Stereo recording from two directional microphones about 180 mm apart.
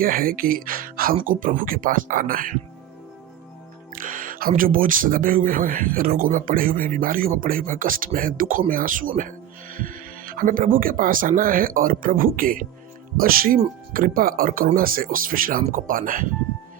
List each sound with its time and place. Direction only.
0.0 s speech: 55° right (ahead or behind)
3.9 s speech: 50° right (ahead or behind)